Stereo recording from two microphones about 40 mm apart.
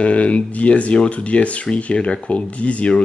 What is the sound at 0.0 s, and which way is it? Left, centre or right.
Speech, left.